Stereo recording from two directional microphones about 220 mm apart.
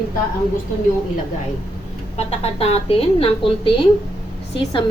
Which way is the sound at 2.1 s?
30° left (ahead or behind).